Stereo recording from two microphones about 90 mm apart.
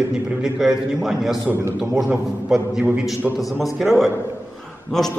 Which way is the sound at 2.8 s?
15° right (ahead or behind).